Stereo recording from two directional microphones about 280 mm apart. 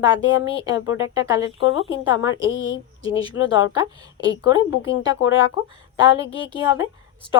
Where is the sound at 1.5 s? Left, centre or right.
Left.